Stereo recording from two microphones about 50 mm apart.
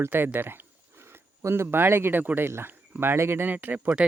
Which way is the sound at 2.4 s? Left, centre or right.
Right.